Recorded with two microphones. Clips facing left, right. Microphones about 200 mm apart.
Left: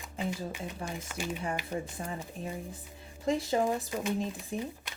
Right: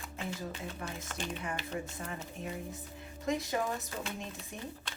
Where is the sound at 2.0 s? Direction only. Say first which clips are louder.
Left 3 dB; 30° left (ahead or behind).